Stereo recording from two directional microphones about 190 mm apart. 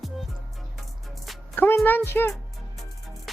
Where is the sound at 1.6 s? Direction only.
10° left (ahead or behind).